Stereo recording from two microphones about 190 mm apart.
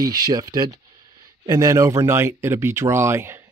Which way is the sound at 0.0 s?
20° right (ahead or behind).